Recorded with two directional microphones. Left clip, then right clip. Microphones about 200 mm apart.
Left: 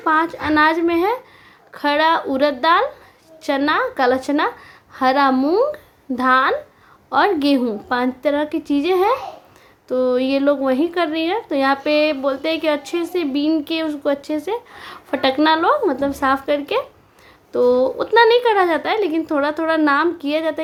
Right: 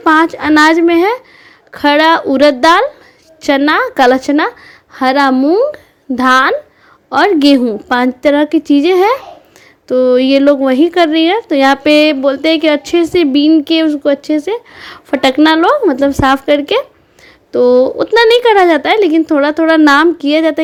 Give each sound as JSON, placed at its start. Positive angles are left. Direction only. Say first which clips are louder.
{"t": 0.0, "sound": "speech", "louder": "right 8 dB", "side_deg": -40}